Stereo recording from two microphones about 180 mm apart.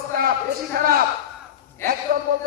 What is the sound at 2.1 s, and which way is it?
Speech, 60° right (ahead or behind).